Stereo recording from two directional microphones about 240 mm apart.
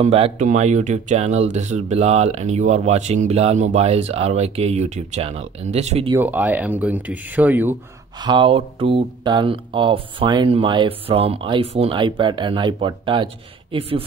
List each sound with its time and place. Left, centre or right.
0.0 s speech: right
6.1 s speech: centre
8.2 s speech: centre